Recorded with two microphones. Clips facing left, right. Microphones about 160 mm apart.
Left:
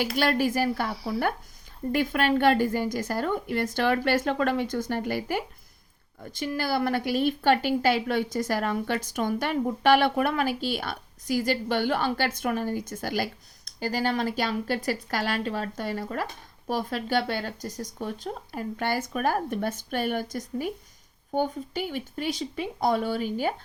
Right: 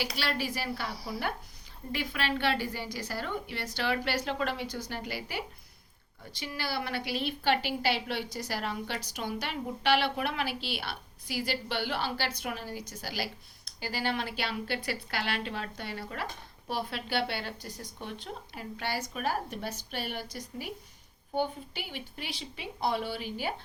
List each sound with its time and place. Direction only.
0.2 s a woman's voice: 50° left (ahead or behind)